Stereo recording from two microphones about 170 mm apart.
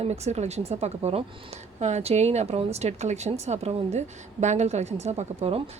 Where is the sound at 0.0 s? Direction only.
40° right (ahead or behind).